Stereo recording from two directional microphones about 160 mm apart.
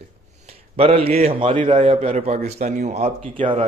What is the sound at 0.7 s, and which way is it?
A man's voice, 35° right (ahead or behind).